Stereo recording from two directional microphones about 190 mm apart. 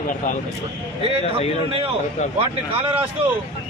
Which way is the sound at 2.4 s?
30° right (ahead or behind).